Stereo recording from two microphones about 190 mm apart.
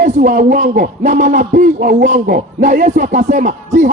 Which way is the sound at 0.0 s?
40° right (ahead or behind).